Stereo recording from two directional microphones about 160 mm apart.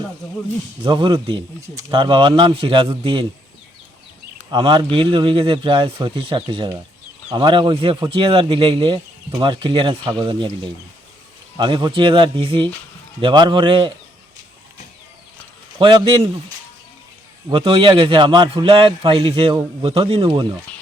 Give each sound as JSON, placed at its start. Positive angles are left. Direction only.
{"t": 0.8, "sound": "a man's voice", "side_deg": -30}
{"t": 4.5, "sound": "a man's voice", "side_deg": -30}
{"t": 11.5, "sound": "a man's voice", "side_deg": -30}
{"t": 15.8, "sound": "a man's voice", "side_deg": -30}
{"t": 17.5, "sound": "a man's voice", "side_deg": -35}